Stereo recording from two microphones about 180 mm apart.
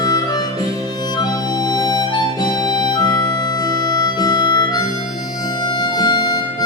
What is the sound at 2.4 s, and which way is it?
Music, 25° left (ahead or behind).